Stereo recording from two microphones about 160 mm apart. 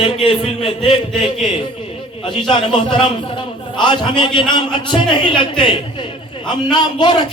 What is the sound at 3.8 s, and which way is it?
A man's voice, 30° left (ahead or behind).